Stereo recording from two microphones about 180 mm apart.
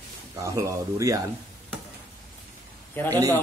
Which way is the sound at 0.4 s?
15° right (ahead or behind).